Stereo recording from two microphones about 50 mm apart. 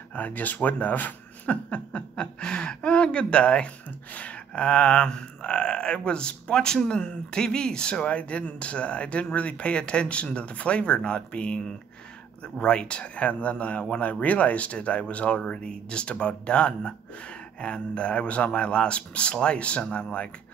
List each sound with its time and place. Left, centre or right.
0.1 s speech: left